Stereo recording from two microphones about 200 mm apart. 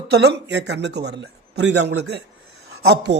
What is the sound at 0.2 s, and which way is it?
Speech, 55° right (ahead or behind).